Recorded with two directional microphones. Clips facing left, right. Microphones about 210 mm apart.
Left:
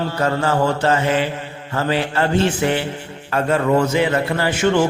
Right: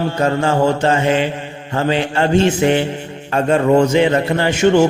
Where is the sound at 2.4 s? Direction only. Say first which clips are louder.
Right 4 dB; 15° right (ahead or behind).